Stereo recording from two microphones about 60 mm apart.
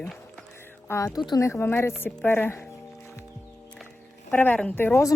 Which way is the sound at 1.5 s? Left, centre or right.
Left.